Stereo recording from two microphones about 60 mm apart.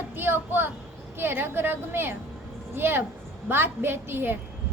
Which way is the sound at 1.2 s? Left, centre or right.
Right.